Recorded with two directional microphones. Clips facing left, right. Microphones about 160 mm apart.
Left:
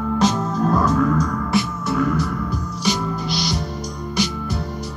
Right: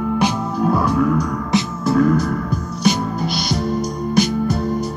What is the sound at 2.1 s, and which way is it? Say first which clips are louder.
Music: right 3 dB; 50° right (ahead or behind).